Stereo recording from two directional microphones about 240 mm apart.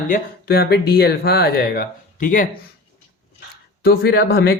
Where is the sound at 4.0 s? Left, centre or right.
Left.